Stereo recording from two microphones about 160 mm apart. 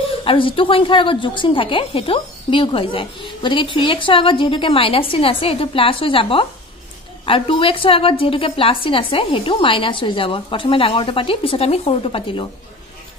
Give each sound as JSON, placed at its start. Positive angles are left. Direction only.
{"t": 0.2, "sound": "a woman's voice", "side_deg": 35}